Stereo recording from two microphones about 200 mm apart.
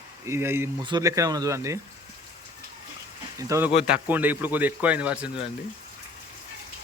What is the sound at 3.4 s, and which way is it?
A man's voice, 15° right (ahead or behind).